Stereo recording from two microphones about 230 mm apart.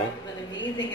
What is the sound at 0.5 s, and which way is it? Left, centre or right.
Speech, left.